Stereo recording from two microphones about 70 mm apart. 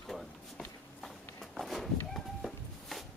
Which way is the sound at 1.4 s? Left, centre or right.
Centre.